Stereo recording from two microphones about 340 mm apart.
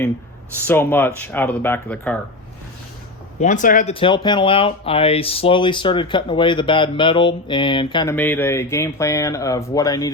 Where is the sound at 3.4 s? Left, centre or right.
Left.